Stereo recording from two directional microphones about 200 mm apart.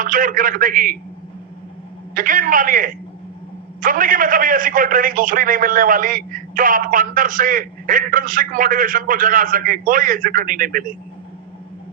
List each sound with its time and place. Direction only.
0.0 s a man's voice: 45° right (ahead or behind)
2.1 s a man's voice: 45° right (ahead or behind)